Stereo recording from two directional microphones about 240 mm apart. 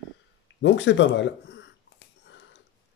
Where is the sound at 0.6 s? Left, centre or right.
Left.